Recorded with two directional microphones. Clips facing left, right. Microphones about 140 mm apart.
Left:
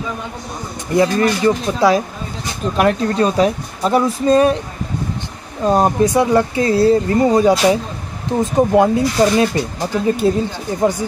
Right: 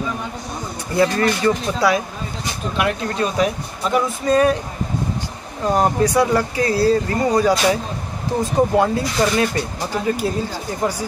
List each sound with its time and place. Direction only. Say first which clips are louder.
0.9 s speech: left 3 dB; 20° left (ahead or behind)
2.8 s speech: left 6 dB; 35° left (ahead or behind)
5.6 s speech: left 3 dB; 20° left (ahead or behind)